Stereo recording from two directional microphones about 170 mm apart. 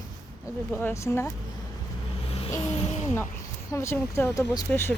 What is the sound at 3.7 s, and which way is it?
Speech, 15° left (ahead or behind).